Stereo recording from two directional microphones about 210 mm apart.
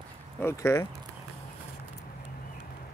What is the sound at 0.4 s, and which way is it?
Speech, 10° left (ahead or behind).